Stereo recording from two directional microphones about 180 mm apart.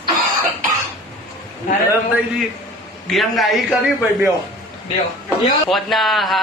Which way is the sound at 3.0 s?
Centre (ahead or behind).